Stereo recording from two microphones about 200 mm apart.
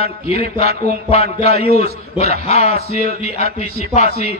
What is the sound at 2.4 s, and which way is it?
A man's voice, 35° left (ahead or behind).